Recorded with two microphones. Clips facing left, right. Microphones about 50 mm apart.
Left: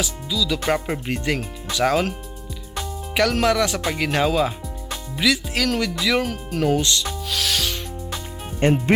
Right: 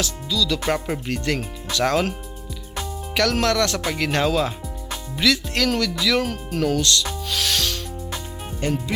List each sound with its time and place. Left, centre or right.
0.0 s speech: centre
3.2 s speech: centre
6.2 s speech: centre
6.7 s speech: centre
7.3 s rub: centre
8.6 s speech: left